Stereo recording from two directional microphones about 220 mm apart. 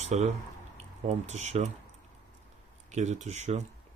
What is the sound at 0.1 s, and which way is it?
Speech, 30° right (ahead or behind).